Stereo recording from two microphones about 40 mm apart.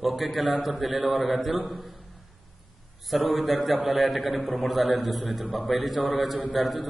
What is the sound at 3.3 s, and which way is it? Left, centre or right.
Speech, centre.